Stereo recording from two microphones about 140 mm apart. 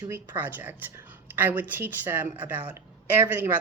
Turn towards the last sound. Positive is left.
turn(degrees=-15)  # may be behind; listen again after turning